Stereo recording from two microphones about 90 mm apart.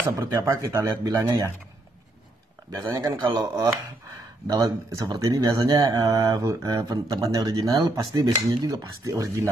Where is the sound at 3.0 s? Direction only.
50° right (ahead or behind).